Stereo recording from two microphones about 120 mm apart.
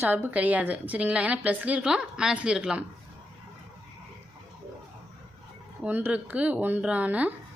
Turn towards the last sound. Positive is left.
turn(degrees=-10)  # may be behind; listen again after turning